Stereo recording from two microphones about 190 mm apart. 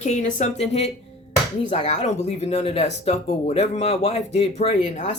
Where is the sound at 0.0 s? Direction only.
40° left (ahead or behind).